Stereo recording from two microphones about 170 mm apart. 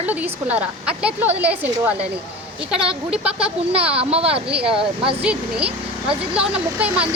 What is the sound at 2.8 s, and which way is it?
Speech, 35° right (ahead or behind).